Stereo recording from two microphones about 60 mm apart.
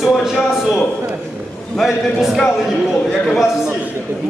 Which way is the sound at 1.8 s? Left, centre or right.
Centre.